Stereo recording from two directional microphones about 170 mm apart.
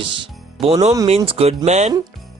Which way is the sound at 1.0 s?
35° right (ahead or behind).